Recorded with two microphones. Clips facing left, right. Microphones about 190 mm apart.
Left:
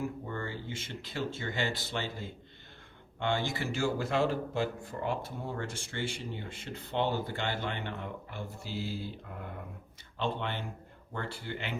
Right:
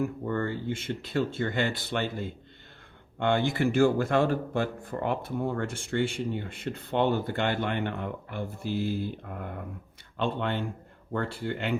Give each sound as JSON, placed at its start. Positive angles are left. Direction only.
{"t": 0.3, "sound": "speech", "side_deg": -55}